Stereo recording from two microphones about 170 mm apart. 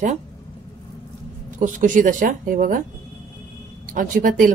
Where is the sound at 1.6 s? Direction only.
50° right (ahead or behind).